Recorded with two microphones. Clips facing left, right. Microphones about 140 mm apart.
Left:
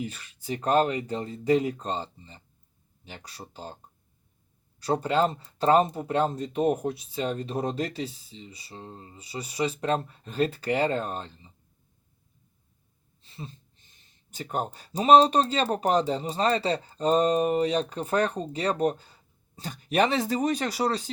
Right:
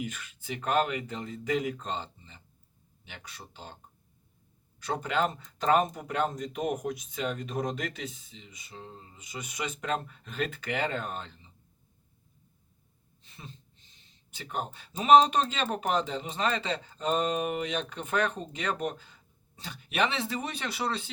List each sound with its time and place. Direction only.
0.0 s speech: 35° left (ahead or behind)
4.8 s speech: 35° left (ahead or behind)
13.8 s speech: 45° left (ahead or behind)